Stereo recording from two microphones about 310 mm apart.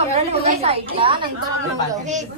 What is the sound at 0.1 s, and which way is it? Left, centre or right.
A woman's voice, centre.